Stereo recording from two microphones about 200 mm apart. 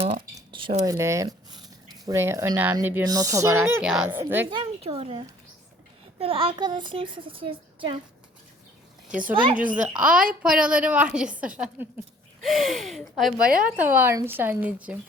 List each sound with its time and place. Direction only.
0.3 s a sound: 25° right (ahead or behind)
2.0 s speech: 15° right (ahead or behind)
4.5 s a child's voice: 25° right (ahead or behind)
9.0 s a woman's voice: 5° right (ahead or behind)
13.7 s speech: 10° right (ahead or behind)